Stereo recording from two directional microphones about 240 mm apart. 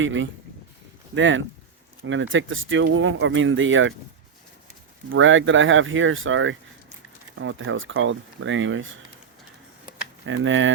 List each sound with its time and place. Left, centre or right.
0.0 s speech: right
5.1 s speech: right
10.2 s speech: right